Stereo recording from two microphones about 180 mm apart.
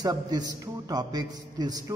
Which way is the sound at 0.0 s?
20° right (ahead or behind).